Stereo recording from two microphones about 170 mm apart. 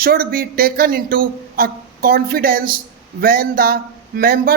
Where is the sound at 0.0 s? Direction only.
60° right (ahead or behind).